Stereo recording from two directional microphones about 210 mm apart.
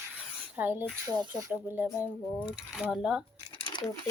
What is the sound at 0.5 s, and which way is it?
Speech, 10° right (ahead or behind).